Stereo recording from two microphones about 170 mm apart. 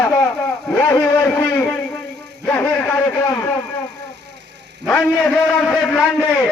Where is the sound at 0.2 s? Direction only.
15° left (ahead or behind).